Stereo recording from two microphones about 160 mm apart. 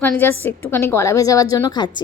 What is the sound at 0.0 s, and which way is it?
A woman's voice, 10° left (ahead or behind).